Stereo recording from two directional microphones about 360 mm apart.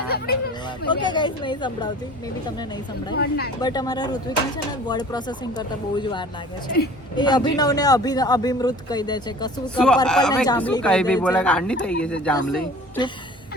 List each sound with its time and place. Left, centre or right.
0.9 s speech: centre
3.2 s speech: left
3.6 s speech: centre